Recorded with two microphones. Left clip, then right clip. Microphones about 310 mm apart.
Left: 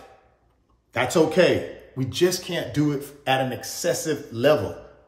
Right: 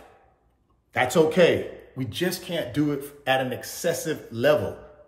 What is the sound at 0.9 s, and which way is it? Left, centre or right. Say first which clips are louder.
A man's voice: even; centre.